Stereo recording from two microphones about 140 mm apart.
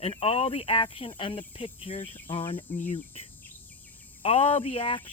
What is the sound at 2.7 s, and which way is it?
Cricket, 15° left (ahead or behind).